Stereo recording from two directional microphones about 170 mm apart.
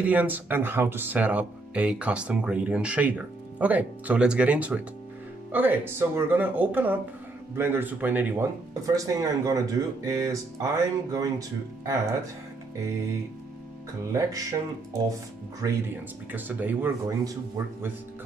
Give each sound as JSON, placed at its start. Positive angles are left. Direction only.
{"t": 0.0, "sound": "speech", "side_deg": -10}
{"t": 14.1, "sound": "speech", "side_deg": -20}
{"t": 16.3, "sound": "speech", "side_deg": -10}